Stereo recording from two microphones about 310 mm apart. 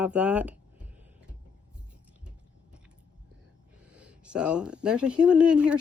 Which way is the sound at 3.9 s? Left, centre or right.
Centre.